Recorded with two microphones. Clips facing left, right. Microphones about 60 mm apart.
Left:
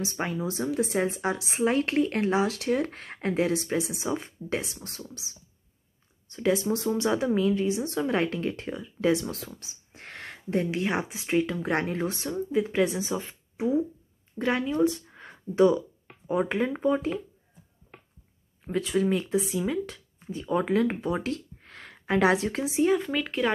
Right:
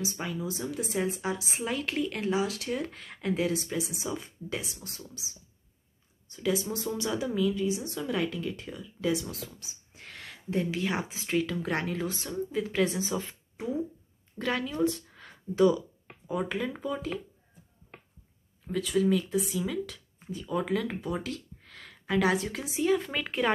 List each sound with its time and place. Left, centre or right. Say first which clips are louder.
0.0 s a woman's voice: left 4 dB; left
6.3 s a woman's voice: left 5 dB; left
12.3 s speech: left 5 dB; left
14.8 s a sound: left 4 dB; left
16.3 s a woman's voice: left 5 dB; left
18.7 s a woman's voice: left 1 dB; left
22.9 s speech: left 3 dB; centre